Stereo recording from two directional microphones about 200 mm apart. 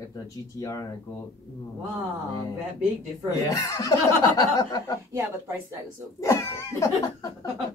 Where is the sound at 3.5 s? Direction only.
15° left (ahead or behind).